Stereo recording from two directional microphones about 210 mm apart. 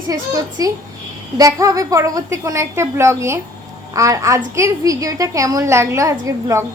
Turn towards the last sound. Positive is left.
turn(degrees=-15)  # may be behind; listen again after turning